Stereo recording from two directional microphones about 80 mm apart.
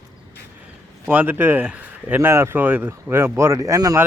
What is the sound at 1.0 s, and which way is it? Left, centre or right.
Speech, right.